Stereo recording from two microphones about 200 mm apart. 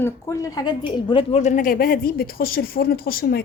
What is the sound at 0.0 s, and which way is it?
A woman's voice, 15° left (ahead or behind).